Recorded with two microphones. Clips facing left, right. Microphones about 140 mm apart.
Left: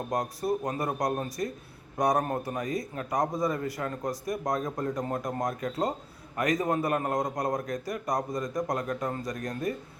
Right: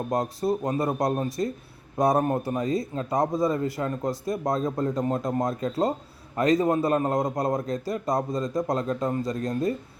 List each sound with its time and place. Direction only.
0.1 s a man's voice: 25° right (ahead or behind)